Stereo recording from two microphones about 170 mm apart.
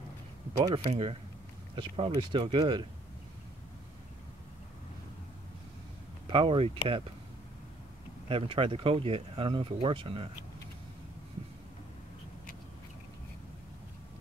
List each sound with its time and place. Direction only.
0.7 s speech: 30° right (ahead or behind)
6.2 s speech: 30° right (ahead or behind)
8.3 s speech: 35° right (ahead or behind)